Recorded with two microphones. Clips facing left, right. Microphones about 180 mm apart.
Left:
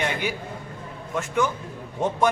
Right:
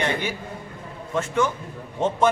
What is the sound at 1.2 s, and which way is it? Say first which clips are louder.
Speech: right 1 dB; centre (ahead or behind).